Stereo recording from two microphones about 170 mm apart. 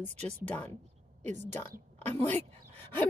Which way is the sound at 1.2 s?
40° right (ahead or behind).